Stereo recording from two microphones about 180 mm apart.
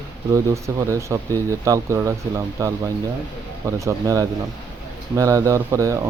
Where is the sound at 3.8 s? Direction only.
20° right (ahead or behind).